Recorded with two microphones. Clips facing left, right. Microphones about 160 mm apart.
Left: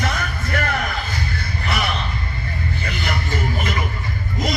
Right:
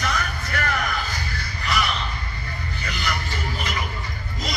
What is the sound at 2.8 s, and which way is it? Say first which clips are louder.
Music: even; 55° left (ahead or behind).